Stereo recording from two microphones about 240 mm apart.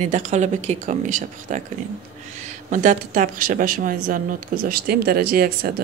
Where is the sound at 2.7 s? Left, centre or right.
Right.